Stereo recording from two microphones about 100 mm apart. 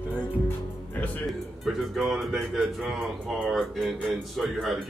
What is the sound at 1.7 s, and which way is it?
A man's voice, centre (ahead or behind).